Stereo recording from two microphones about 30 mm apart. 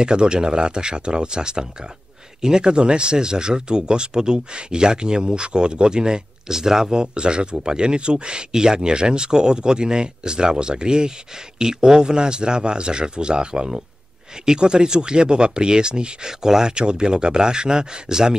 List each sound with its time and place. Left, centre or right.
0.0 s speech: right